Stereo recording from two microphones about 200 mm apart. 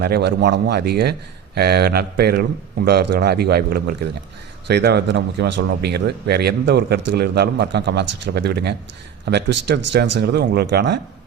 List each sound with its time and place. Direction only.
0.0 s a man's voice: 55° right (ahead or behind)